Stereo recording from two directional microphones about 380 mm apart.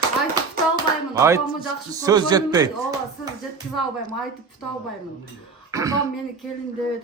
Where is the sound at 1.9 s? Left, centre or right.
Centre.